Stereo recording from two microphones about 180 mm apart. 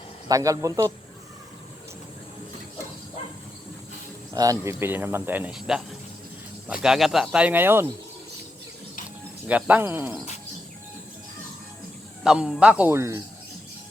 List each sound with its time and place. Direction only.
0.3 s speech: 20° right (ahead or behind)
4.4 s speech: 20° right (ahead or behind); by 5.8 s 5° right (ahead or behind)
6.8 s speech: centre (ahead or behind)
9.5 s speech: 10° right (ahead or behind)
12.2 s speech: 5° right (ahead or behind)